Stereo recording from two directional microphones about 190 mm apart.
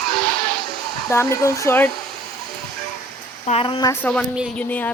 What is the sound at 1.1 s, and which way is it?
Speech, 15° left (ahead or behind).